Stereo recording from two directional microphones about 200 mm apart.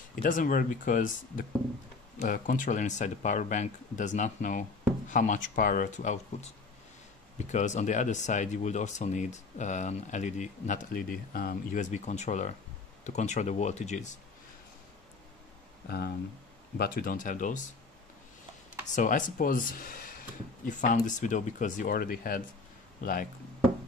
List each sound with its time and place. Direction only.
0.1 s speech: 45° left (ahead or behind)
7.5 s speech: 35° left (ahead or behind)
16.7 s speech: 50° left (ahead or behind)
18.9 s speech: 40° left (ahead or behind)